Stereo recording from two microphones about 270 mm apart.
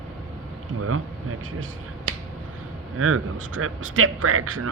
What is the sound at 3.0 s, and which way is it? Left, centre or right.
Speech, right.